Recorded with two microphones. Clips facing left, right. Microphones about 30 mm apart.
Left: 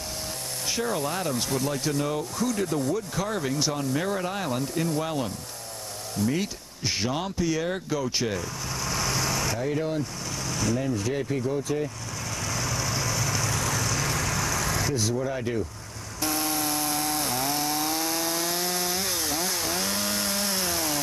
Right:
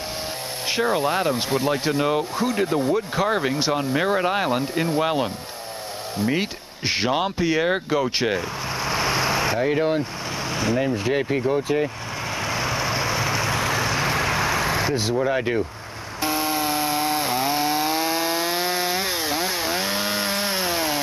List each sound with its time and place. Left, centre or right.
0.7 s speech: right
12.4 s vehicle: right
16.2 s chainsaw: right